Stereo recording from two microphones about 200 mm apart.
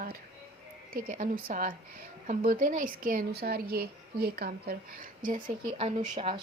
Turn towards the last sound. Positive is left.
turn(degrees=-35)  # may be behind; listen again after turning